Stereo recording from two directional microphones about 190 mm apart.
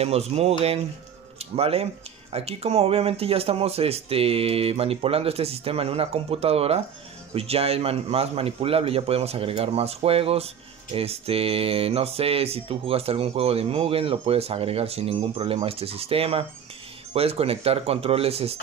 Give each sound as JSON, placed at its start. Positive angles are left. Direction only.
{"t": 0.0, "sound": "speech", "side_deg": -35}